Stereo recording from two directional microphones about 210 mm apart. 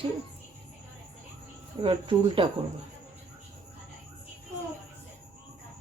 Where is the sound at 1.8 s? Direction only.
25° right (ahead or behind).